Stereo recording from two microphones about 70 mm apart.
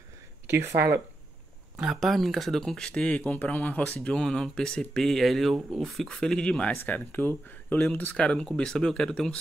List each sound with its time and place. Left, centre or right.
0.5 s speech: right
1.8 s speech: centre
6.0 s speech: centre
6.7 s speech: left; by 9.4 s centre